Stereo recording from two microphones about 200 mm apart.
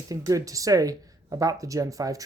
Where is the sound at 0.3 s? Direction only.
15° right (ahead or behind).